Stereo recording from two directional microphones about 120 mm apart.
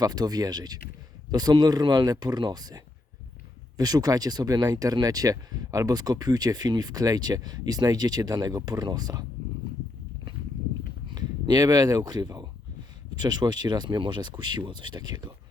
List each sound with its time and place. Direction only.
0.0 s speech: 35° right (ahead or behind)
11.1 s speech: 35° right (ahead or behind)